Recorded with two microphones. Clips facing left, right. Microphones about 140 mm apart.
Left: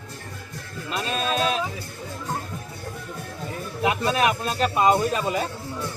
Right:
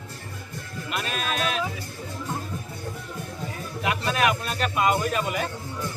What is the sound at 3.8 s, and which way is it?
A man's voice, 30° left (ahead or behind).